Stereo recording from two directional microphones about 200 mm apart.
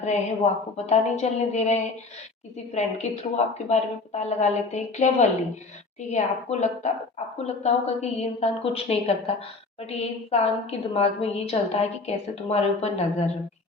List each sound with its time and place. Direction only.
0.0 s a woman's voice: 35° left (ahead or behind)